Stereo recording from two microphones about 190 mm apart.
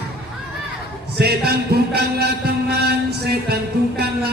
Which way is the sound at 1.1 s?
55° right (ahead or behind).